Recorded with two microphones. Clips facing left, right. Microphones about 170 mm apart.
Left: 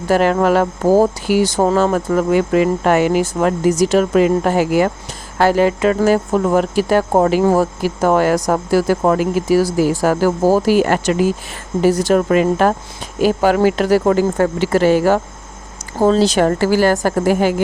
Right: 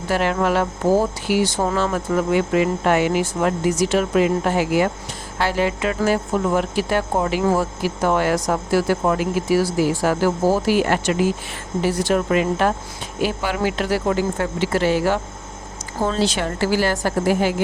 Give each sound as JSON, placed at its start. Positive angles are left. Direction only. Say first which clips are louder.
{"t": 0.1, "sound": "speech", "louder": "left 6 dB", "side_deg": 45}